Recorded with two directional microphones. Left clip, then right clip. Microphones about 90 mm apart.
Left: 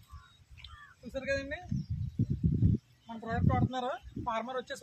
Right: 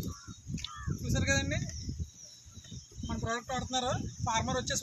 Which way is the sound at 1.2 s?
25° left (ahead or behind).